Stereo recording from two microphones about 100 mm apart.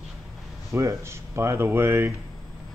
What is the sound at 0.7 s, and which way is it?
Speech, 30° right (ahead or behind).